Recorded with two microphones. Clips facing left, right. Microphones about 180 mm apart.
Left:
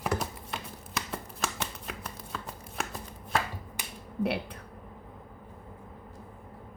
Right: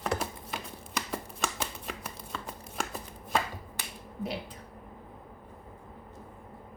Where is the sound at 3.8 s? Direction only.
15° left (ahead or behind).